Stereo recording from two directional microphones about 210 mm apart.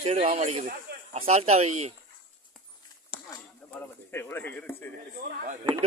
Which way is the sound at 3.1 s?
50° left (ahead or behind).